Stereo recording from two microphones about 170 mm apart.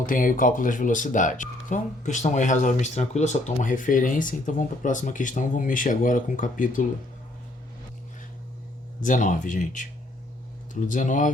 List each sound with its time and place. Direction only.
0.0 s speech: 55° left (ahead or behind)
9.0 s speech: 50° left (ahead or behind)